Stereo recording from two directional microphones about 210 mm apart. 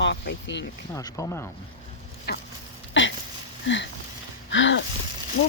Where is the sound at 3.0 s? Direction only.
60° left (ahead or behind).